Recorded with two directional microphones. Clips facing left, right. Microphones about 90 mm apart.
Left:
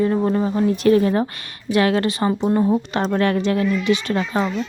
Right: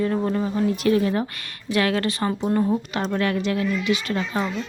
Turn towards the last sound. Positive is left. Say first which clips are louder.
# left 4 dB
turn(degrees=35)  # may be behind; listen again after turning